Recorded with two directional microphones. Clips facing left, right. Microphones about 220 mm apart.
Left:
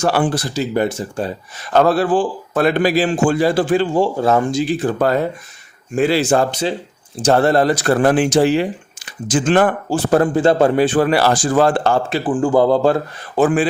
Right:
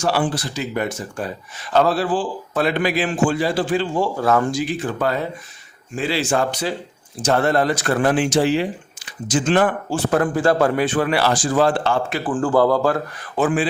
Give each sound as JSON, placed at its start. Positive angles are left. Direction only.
{"t": 0.0, "sound": "a man's voice", "side_deg": 50}
{"t": 0.5, "sound": "a man's voice", "side_deg": 35}
{"t": 1.7, "sound": "a man's voice", "side_deg": 50}
{"t": 3.9, "sound": "a man's voice", "side_deg": 25}
{"t": 6.5, "sound": "a man's voice", "side_deg": 25}
{"t": 12.1, "sound": "speech", "side_deg": 15}
{"t": 13.4, "sound": "a man's voice", "side_deg": 45}